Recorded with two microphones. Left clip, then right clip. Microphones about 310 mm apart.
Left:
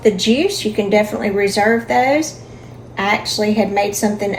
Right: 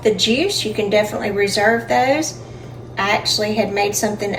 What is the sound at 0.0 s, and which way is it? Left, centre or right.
A woman's voice, left.